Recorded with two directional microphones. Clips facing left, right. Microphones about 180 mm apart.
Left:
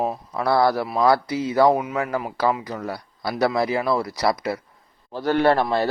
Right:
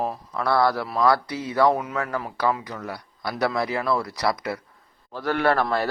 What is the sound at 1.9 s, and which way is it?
A man's voice, 25° left (ahead or behind).